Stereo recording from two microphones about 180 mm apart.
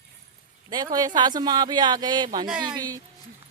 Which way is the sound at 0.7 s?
20° right (ahead or behind).